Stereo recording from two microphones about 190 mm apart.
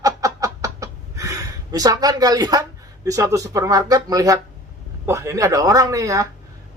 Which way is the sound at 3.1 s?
15° right (ahead or behind).